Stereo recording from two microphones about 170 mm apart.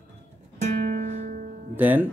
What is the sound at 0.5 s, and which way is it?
Music, 50° right (ahead or behind).